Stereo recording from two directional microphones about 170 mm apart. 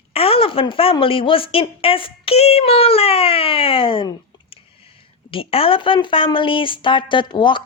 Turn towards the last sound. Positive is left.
turn(degrees=25)  # may be behind; listen again after turning